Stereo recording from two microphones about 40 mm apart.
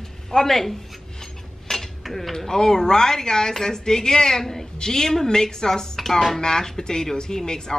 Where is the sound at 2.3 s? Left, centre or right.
Centre.